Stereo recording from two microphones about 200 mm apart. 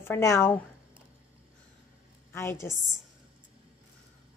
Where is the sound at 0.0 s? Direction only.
15° left (ahead or behind).